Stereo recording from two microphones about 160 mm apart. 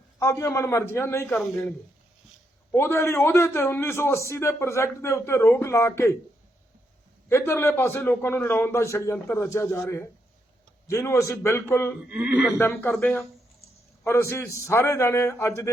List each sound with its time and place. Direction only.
0.2 s a man's voice: 20° left (ahead or behind)
2.7 s a man's voice: 15° left (ahead or behind)
7.3 s a man's voice: 15° left (ahead or behind)
12.0 s speech: 5° right (ahead or behind)
12.5 s a man's voice: 15° left (ahead or behind)